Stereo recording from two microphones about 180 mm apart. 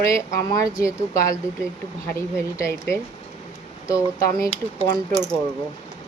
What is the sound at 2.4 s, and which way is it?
Speech, 15° left (ahead or behind).